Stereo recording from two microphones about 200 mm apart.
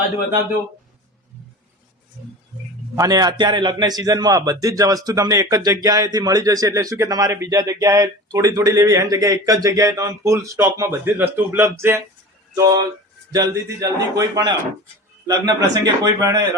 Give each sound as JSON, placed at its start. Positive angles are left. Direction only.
{"t": 2.9, "sound": "a man's voice", "side_deg": -15}